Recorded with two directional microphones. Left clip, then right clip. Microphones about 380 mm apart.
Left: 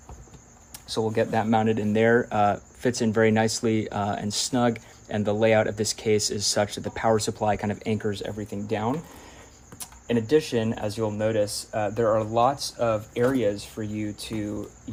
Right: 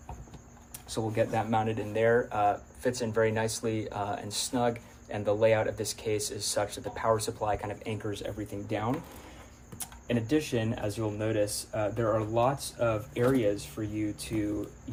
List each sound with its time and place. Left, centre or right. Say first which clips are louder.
0.9 s speech: left 5 dB; left
9.8 s speech: left 6 dB; left